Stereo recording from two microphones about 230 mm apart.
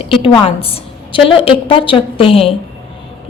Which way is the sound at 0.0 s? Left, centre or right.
Left.